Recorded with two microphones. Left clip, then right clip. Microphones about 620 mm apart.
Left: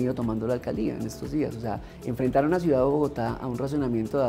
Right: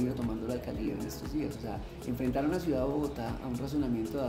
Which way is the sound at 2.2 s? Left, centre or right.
Left.